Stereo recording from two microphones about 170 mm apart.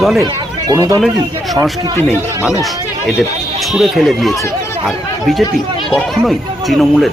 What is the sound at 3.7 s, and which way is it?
Speech, centre (ahead or behind).